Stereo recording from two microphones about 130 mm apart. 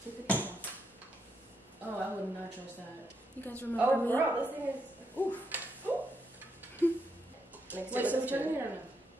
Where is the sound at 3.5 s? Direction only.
15° right (ahead or behind).